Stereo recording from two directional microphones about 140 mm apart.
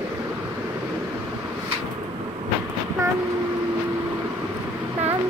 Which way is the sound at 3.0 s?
20° right (ahead or behind).